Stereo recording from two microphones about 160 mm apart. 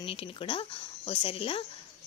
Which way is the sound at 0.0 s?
35° left (ahead or behind).